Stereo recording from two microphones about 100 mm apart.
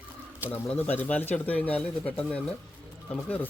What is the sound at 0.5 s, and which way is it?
Speech, 15° left (ahead or behind).